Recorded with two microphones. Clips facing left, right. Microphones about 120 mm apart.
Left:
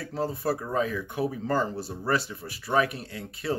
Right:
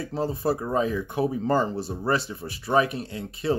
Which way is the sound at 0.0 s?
25° right (ahead or behind).